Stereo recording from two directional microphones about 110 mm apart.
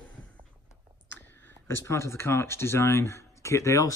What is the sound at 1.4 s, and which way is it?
Speech, 25° left (ahead or behind).